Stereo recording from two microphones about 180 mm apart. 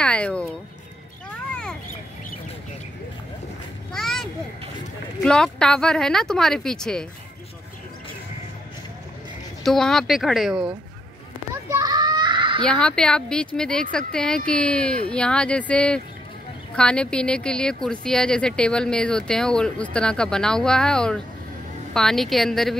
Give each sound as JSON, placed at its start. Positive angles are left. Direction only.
{"t": 0.0, "sound": "speech", "side_deg": 5}
{"t": 1.3, "sound": "a sound", "side_deg": 5}
{"t": 3.9, "sound": "a sound", "side_deg": 0}
{"t": 5.2, "sound": "speech", "side_deg": 5}
{"t": 9.6, "sound": "speech", "side_deg": 0}
{"t": 11.7, "sound": "children playing", "side_deg": -20}
{"t": 12.6, "sound": "speech", "side_deg": 5}